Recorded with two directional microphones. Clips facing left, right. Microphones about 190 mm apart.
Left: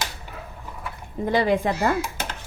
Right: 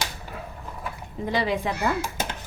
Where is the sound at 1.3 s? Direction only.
50° left (ahead or behind).